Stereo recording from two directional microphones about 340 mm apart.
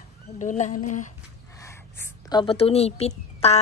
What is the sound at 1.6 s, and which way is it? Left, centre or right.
A woman's voice, centre.